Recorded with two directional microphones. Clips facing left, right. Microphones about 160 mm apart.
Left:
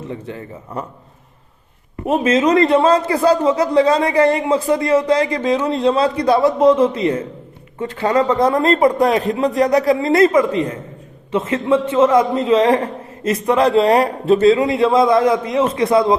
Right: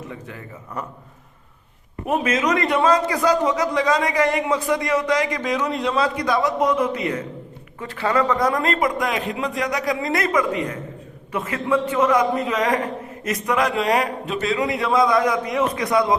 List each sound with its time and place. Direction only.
0.1 s a man's voice: 30° left (ahead or behind)
2.0 s a man's voice: 25° left (ahead or behind)